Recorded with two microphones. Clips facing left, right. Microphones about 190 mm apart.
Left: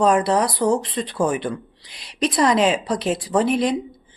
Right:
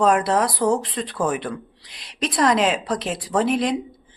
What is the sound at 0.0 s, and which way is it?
Speech, centre (ahead or behind).